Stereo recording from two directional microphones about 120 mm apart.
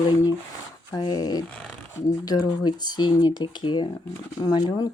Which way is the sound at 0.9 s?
35° left (ahead or behind).